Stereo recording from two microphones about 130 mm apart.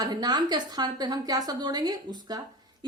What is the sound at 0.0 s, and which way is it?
A woman's voice, 30° right (ahead or behind).